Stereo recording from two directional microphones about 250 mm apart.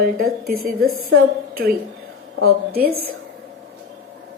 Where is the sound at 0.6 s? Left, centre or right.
Right.